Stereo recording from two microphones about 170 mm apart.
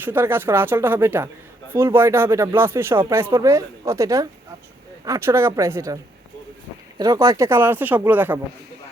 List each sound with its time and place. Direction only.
0.0 s speech: 15° right (ahead or behind)
7.0 s speech: 20° right (ahead or behind)